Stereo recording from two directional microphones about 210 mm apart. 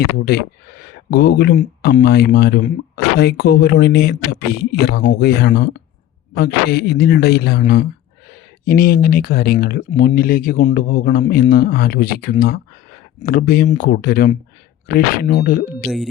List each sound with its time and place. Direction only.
0.0 s speech: 50° left (ahead or behind)
15.8 s speech: centre (ahead or behind)